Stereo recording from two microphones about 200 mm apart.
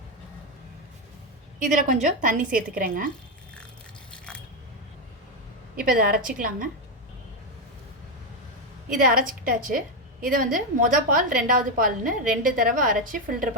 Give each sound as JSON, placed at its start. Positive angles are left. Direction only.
{"t": 1.5, "sound": "a woman's voice", "side_deg": -40}
{"t": 5.7, "sound": "a woman's voice", "side_deg": -45}
{"t": 9.0, "sound": "a woman's voice", "side_deg": -45}